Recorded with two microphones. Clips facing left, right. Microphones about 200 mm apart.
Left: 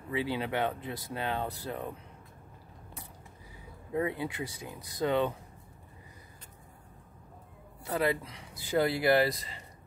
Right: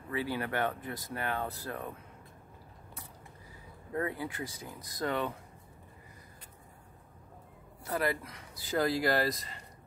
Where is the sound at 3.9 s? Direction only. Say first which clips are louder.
Left 3 dB; 15° left (ahead or behind).